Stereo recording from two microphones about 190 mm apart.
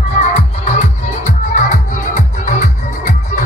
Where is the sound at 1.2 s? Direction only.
40° left (ahead or behind).